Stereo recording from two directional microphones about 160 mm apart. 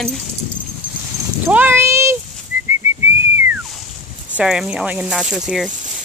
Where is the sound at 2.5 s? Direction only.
15° right (ahead or behind).